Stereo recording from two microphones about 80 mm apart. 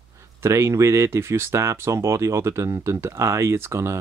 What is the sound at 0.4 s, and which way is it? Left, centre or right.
Speech, right.